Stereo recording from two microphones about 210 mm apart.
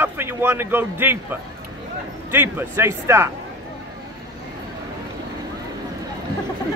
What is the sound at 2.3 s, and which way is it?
Speech, 10° right (ahead or behind).